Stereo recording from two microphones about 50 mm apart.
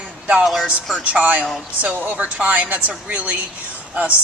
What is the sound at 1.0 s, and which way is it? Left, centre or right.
A woman's voice, right.